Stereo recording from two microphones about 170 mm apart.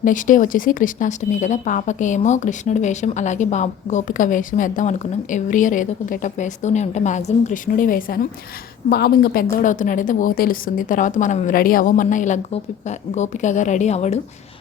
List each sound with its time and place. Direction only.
0.0 s speech: 50° left (ahead or behind)
8.9 s a woman's voice: 65° left (ahead or behind)
9.6 s speech: 50° left (ahead or behind)